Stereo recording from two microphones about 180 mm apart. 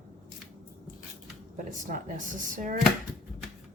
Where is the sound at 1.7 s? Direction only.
45° right (ahead or behind).